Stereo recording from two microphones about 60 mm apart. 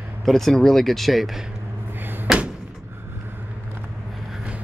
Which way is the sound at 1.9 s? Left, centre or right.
Right.